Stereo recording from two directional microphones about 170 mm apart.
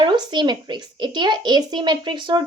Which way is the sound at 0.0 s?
25° right (ahead or behind).